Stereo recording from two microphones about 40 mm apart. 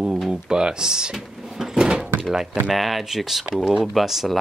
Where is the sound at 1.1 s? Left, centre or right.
Centre.